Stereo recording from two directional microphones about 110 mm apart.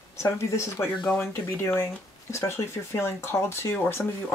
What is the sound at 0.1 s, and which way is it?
Speech, 25° left (ahead or behind).